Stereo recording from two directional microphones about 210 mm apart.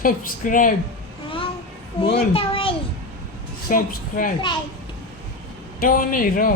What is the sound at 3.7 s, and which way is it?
Speech, 40° left (ahead or behind).